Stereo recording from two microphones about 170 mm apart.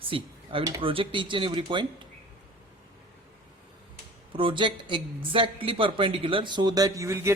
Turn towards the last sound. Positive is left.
turn(degrees=-15)  # may be behind; listen again after turning